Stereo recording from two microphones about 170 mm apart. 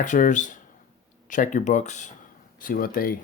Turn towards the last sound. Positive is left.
turn(degrees=60)  # may be behind; listen again after turning